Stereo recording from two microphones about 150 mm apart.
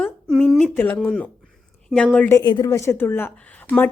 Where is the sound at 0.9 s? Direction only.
5° left (ahead or behind).